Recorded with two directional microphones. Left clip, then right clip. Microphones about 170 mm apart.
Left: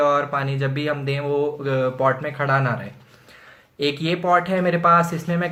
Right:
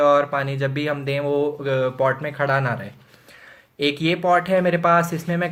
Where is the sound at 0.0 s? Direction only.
40° right (ahead or behind).